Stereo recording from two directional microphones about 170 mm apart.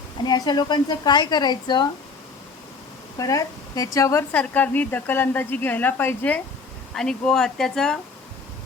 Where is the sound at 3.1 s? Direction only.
20° left (ahead or behind).